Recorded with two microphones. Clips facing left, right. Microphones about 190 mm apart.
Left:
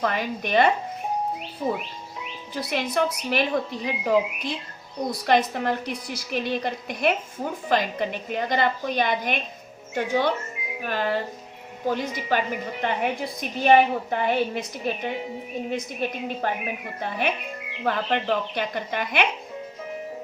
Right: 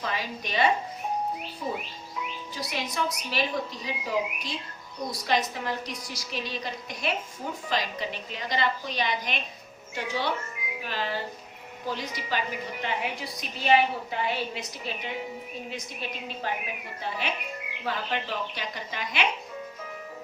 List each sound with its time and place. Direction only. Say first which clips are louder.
0.0 s speech: left 7 dB; 55° left (ahead or behind)
2.6 s a woman's voice: left 7 dB; 60° left (ahead or behind)